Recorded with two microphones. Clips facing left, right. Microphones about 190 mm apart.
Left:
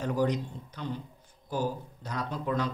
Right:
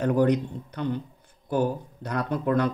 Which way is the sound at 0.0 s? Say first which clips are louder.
Right 7 dB; 60° right (ahead or behind).